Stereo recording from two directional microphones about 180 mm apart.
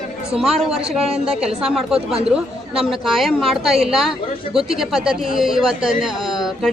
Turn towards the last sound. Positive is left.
turn(degrees=0)  # may be behind; listen again after turning